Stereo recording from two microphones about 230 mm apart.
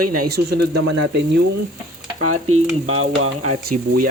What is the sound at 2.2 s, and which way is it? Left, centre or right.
Speech, right.